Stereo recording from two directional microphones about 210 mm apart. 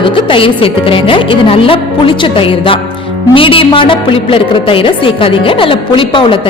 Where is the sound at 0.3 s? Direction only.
25° left (ahead or behind).